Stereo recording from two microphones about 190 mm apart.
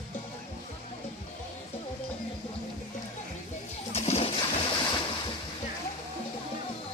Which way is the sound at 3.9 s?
35° left (ahead or behind).